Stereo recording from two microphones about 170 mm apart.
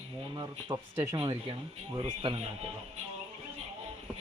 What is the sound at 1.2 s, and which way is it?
Speech, 30° right (ahead or behind).